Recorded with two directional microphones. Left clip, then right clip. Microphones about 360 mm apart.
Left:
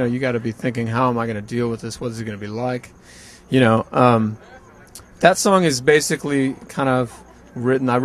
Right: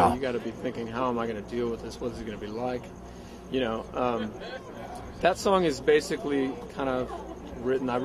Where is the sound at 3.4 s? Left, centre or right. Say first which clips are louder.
Left 13 dB; left.